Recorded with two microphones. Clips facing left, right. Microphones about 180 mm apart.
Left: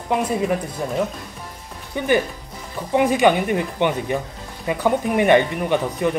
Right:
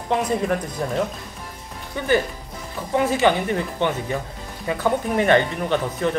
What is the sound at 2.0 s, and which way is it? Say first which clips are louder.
Speech: left 1 dB; 15° left (ahead or behind).